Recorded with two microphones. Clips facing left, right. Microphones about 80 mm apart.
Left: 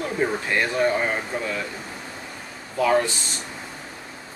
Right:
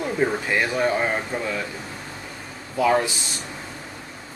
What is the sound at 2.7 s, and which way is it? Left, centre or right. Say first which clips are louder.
Speech: even; centre.